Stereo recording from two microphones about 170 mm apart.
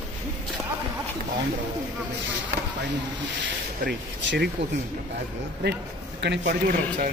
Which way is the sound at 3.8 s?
70° right (ahead or behind).